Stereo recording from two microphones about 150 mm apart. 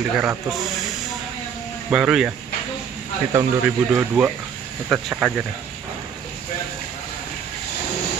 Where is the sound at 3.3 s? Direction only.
15° right (ahead or behind).